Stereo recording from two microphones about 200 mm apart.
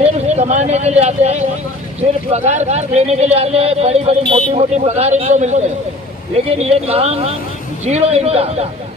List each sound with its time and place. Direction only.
0.0 s a man's voice: 35° right (ahead or behind)